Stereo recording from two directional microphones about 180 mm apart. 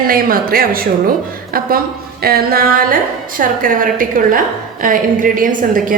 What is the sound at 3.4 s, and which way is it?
Speech, 50° right (ahead or behind).